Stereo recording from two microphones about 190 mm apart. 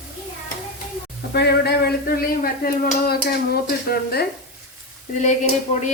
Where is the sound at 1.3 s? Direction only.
60° left (ahead or behind).